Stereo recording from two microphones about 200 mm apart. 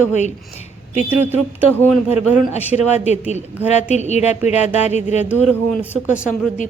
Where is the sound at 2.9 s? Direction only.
35° left (ahead or behind).